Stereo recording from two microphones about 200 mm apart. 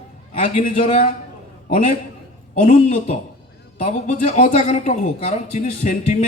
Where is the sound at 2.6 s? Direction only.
40° left (ahead or behind).